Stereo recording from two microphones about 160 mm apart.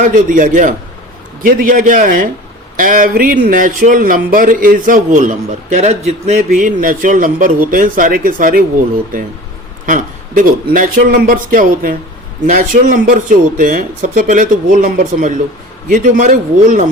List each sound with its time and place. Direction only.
0.0 s a man's voice: 55° right (ahead or behind)
9.8 s a man's voice: 55° right (ahead or behind)